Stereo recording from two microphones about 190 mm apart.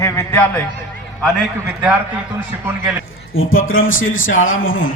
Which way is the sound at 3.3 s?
90° left.